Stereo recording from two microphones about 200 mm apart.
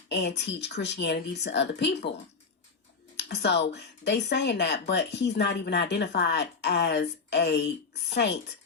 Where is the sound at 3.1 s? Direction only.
60° left (ahead or behind).